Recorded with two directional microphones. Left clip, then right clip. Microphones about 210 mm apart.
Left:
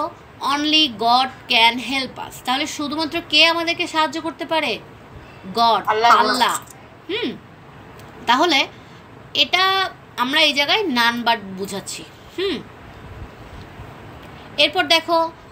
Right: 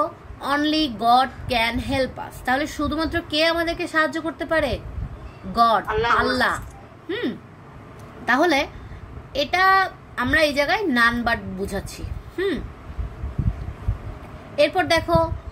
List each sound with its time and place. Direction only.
0.4 s speech: 30° right (ahead or behind)
5.9 s speech: 35° left (ahead or behind)
7.1 s speech: 30° right (ahead or behind)
14.5 s speech: 30° right (ahead or behind)